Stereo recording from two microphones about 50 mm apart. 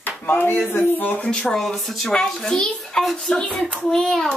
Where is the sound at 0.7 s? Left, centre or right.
Left.